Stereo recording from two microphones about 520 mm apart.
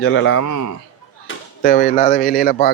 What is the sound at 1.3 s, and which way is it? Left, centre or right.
Chop, left.